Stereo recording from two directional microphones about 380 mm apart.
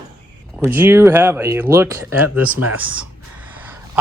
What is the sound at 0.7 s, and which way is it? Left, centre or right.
Speech, centre.